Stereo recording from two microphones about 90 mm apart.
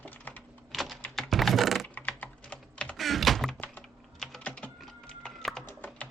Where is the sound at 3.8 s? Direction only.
5° left (ahead or behind).